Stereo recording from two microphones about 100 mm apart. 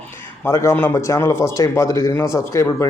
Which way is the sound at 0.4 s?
30° left (ahead or behind).